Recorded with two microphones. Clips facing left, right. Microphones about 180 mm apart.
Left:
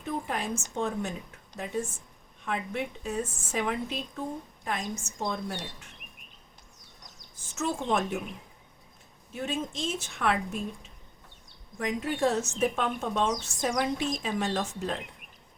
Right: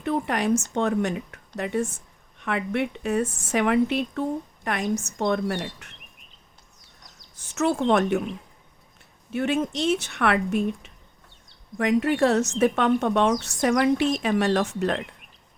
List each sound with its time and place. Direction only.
0.0 s a woman's voice: 75° right (ahead or behind)
7.3 s a woman's voice: 70° right (ahead or behind)
9.3 s a woman's voice: 70° right (ahead or behind)